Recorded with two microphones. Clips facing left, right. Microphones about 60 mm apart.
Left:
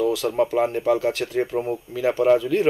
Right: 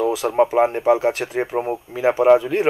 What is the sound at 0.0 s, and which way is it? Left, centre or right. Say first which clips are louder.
Speech: right 3 dB; right.